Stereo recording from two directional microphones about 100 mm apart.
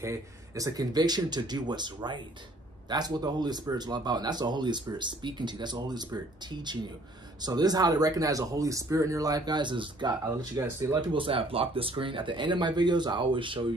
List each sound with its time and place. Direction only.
0.0 s speech: 30° right (ahead or behind); by 10.6 s 50° right (ahead or behind)
10.6 s speech: 30° right (ahead or behind)
11.0 s speech: 60° right (ahead or behind)